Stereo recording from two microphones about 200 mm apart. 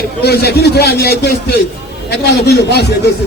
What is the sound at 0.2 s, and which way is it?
A man's voice, 55° left (ahead or behind).